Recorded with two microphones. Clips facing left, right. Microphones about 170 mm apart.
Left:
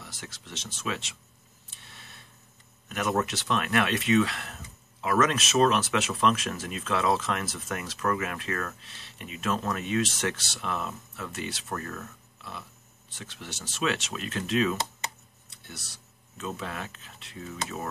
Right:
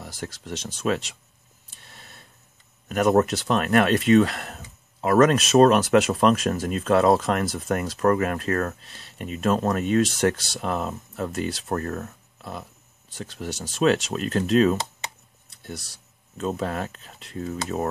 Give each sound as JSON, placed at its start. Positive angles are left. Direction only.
{"t": 0.0, "sound": "speech", "side_deg": -40}
{"t": 1.8, "sound": "a sound", "side_deg": -45}
{"t": 2.9, "sound": "speech", "side_deg": -45}
{"t": 16.3, "sound": "speech", "side_deg": -40}